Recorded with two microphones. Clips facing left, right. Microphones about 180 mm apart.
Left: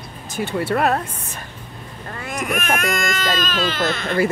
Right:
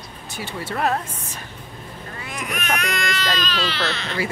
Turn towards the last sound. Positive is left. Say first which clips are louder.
# left 6 dB
turn(degrees=50)  # may be behind; listen again after turning